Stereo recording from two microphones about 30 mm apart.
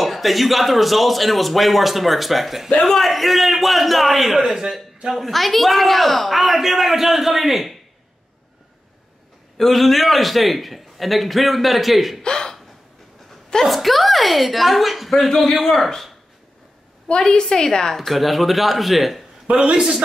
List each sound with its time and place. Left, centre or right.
0.0 s speech: centre
4.4 s a man's voice: right
5.1 s speech: centre
9.6 s speech: centre
12.2 s speech: left
13.7 s speech: centre
17.4 s a woman's voice: left
17.9 s speech: centre
19.5 s a man's voice: right